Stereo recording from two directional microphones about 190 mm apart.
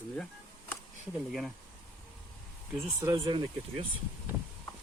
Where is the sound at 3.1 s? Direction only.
25° right (ahead or behind).